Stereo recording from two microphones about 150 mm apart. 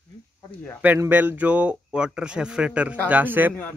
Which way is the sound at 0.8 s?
10° right (ahead or behind).